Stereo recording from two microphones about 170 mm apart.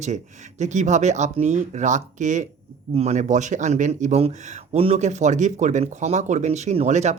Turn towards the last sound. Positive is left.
turn(degrees=-40)  # may be behind; listen again after turning